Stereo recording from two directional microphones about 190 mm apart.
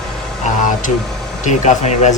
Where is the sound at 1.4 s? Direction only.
40° left (ahead or behind).